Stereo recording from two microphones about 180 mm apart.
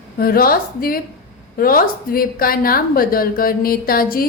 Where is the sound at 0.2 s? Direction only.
55° left (ahead or behind).